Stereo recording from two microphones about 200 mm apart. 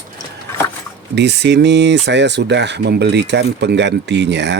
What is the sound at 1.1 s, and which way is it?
Speech, 60° right (ahead or behind).